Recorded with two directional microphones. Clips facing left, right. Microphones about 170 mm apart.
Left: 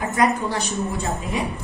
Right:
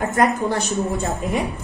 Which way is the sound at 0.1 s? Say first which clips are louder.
Right 1 dB; 50° right (ahead or behind).